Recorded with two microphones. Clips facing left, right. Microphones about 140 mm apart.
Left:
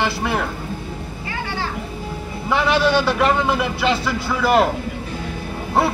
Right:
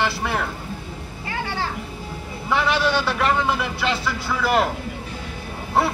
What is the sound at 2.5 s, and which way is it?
Speech, 20° left (ahead or behind).